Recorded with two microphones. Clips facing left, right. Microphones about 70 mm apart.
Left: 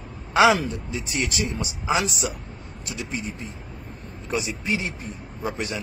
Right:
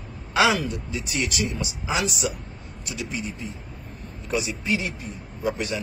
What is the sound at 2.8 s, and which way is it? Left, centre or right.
Speech, left.